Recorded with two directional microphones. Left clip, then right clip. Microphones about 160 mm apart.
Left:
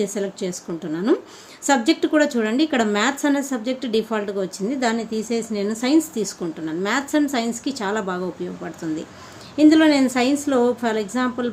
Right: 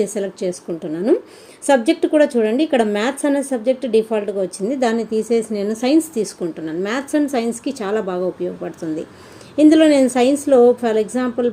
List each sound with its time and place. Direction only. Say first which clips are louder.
0.0 s a woman's voice: right 4 dB; 10° right (ahead or behind)
4.7 s a woman's voice: right 5 dB; 15° right (ahead or behind)
9.6 s a woman's voice: right 3 dB; 10° right (ahead or behind)